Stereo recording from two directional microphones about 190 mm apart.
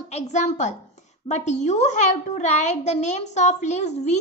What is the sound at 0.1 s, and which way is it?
A child's voice, 40° left (ahead or behind).